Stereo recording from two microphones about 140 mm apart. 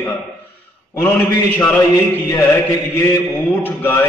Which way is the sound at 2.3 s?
20° left (ahead or behind).